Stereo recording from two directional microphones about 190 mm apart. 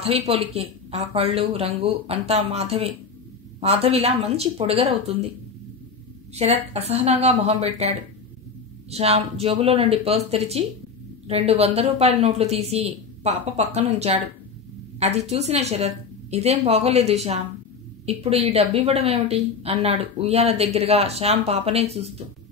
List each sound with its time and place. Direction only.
0.3 s a woman's voice: 35° right (ahead or behind)
6.3 s a woman's voice: 35° right (ahead or behind)
8.9 s a woman's voice: 35° right (ahead or behind)